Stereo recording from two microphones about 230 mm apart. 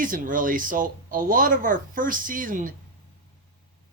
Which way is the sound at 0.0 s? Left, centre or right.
Right.